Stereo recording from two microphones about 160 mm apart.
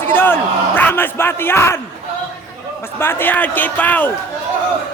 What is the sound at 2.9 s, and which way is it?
A man's voice, 15° left (ahead or behind).